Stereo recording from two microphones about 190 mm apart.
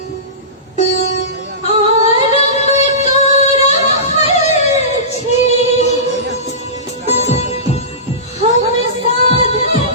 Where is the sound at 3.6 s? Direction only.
35° left (ahead or behind).